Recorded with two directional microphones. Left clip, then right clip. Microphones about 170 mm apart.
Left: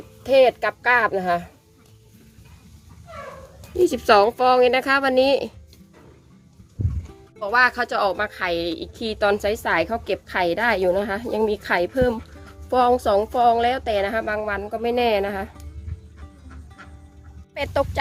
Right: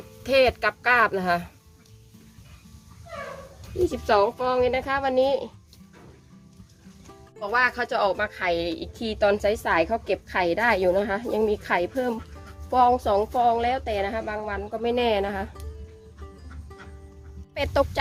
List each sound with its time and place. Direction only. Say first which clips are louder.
0.2 s a woman's voice: left 4 dB; 5° left (ahead or behind)
3.8 s speech: left 5 dB; 40° left (ahead or behind)
7.3 s a woman's voice: left 5 dB; 20° left (ahead or behind)
17.5 s speech: even; 5° right (ahead or behind)